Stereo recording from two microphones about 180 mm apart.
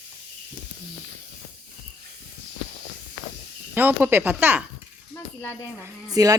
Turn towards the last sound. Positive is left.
turn(degrees=-20)  # may be behind; listen again after turning